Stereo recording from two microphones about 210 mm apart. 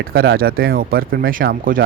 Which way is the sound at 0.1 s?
45° right (ahead or behind).